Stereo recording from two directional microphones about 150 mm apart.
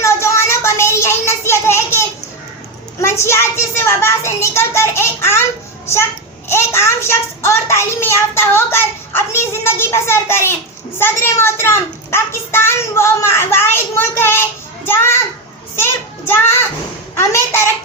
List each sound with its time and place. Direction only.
0.0 s a sound: 20° left (ahead or behind)
3.0 s a child's voice: 15° left (ahead or behind)
17.2 s a woman's voice: 20° left (ahead or behind)